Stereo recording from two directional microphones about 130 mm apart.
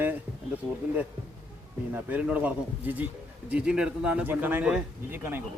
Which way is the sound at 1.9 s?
10° right (ahead or behind).